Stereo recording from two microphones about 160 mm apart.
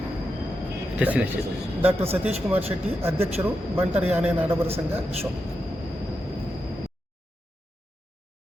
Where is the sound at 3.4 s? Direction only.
10° right (ahead or behind).